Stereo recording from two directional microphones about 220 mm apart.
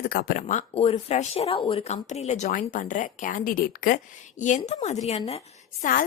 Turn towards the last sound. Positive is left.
turn(degrees=25)  # may be behind; listen again after turning